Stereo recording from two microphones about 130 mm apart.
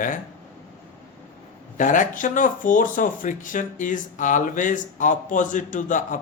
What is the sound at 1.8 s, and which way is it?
Speech, 85° left.